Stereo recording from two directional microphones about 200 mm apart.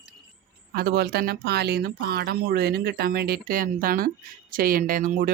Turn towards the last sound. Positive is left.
turn(degrees=-45)  # may be behind; listen again after turning